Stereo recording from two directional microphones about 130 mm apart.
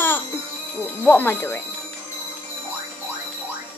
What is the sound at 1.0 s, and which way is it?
Speech, 15° left (ahead or behind).